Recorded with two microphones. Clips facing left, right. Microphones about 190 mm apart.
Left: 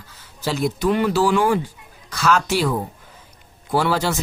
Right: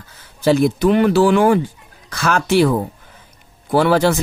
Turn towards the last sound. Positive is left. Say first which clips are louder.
# right 6 dB
turn(degrees=-60)  # may be behind; listen again after turning